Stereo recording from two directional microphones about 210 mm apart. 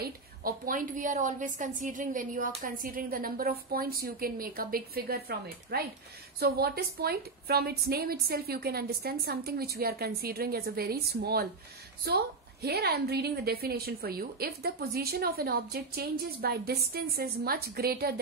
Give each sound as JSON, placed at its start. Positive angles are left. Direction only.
{"t": 0.0, "sound": "a woman's voice", "side_deg": -45}
{"t": 12.6, "sound": "a woman's voice", "side_deg": -50}